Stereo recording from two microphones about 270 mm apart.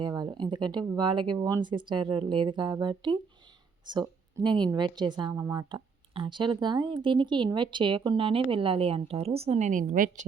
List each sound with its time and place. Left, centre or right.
0.0 s a woman's voice: centre